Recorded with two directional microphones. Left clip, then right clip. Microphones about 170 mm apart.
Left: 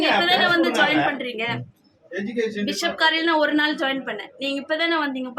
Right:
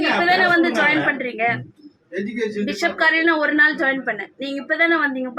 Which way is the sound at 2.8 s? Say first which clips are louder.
Right 3 dB; 15° left (ahead or behind).